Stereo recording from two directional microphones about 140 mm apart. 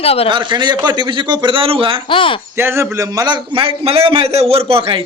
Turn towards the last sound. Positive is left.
turn(degrees=-40)  # may be behind; listen again after turning